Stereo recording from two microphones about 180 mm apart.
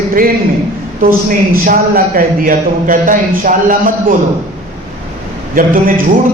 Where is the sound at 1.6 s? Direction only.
50° right (ahead or behind).